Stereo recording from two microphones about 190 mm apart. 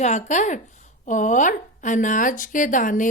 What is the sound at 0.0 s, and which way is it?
Speech, 40° left (ahead or behind).